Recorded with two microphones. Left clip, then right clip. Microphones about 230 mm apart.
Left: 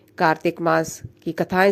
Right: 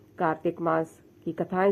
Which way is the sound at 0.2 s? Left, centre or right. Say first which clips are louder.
Left 8 dB; left.